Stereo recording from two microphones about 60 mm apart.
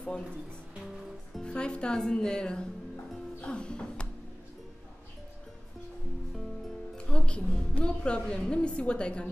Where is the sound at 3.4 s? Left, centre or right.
Centre.